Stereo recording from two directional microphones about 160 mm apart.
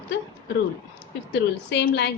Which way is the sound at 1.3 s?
90° left.